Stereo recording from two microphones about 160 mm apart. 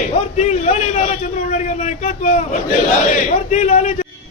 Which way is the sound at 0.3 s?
45° left (ahead or behind).